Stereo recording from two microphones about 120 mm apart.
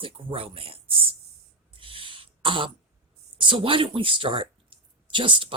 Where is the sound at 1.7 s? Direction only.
45° right (ahead or behind).